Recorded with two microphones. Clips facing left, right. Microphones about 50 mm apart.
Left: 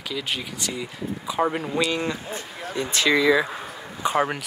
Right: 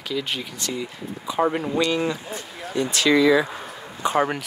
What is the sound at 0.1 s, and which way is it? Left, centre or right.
Speech, centre.